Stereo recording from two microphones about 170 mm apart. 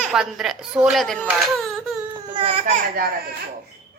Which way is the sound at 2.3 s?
35° right (ahead or behind).